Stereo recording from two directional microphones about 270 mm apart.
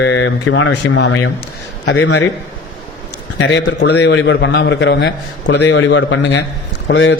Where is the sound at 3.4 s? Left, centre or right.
Left.